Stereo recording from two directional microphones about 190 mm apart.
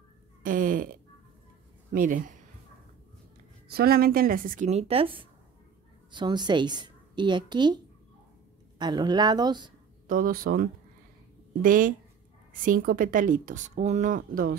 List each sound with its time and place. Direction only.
0.4 s cat: 45° right (ahead or behind)
1.9 s speech: 45° right (ahead or behind)
3.7 s speech: 55° right (ahead or behind); by 5.1 s 30° right (ahead or behind)
6.1 s a woman's voice: 25° right (ahead or behind)
10.0 s speech: 45° right (ahead or behind)